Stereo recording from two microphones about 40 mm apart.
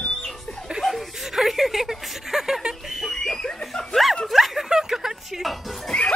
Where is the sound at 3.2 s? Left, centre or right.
Centre.